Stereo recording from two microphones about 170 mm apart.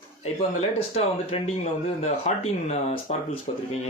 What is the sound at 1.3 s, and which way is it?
A man's voice, 35° left (ahead or behind).